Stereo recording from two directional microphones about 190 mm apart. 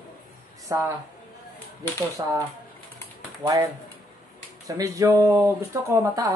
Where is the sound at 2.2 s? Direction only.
20° right (ahead or behind).